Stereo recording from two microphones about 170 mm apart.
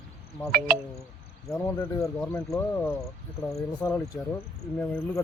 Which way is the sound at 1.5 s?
15° left (ahead or behind).